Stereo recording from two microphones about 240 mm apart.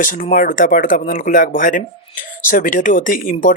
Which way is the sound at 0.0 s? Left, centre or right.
Left.